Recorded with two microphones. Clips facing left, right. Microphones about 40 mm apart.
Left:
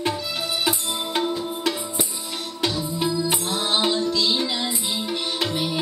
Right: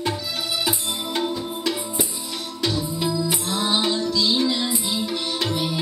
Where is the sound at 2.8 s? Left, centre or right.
Centre.